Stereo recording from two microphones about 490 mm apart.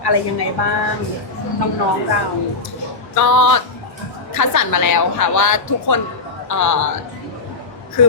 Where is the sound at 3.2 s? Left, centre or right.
Left.